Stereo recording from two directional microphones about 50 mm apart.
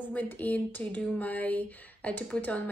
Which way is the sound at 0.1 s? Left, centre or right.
Left.